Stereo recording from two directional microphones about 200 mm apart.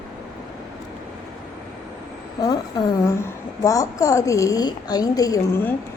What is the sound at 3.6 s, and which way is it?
A woman's voice, 15° left (ahead or behind).